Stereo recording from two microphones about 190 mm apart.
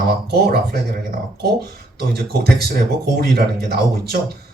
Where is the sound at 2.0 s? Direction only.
55° right (ahead or behind).